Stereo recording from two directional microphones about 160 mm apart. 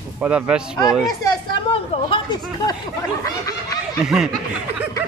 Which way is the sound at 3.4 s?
20° left (ahead or behind).